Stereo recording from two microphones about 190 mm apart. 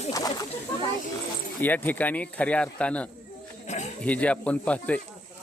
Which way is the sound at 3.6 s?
40° left (ahead or behind).